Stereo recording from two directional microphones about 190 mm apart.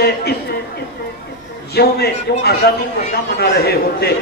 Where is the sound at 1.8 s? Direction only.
55° left (ahead or behind).